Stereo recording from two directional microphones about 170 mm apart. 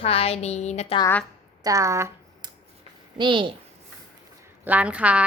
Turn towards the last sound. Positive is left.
turn(degrees=-5)  # may be behind; listen again after turning